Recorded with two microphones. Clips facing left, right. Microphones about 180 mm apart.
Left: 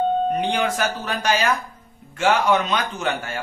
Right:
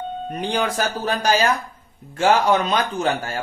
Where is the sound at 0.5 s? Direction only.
35° right (ahead or behind).